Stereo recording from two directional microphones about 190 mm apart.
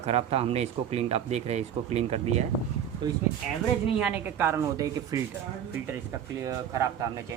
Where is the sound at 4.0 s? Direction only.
5° right (ahead or behind).